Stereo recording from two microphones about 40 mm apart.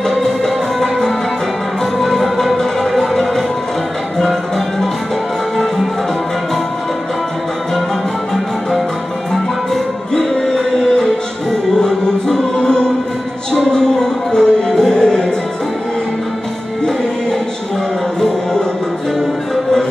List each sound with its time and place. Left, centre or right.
2.0 s music: centre
10.1 s music: centre
12.5 s music: centre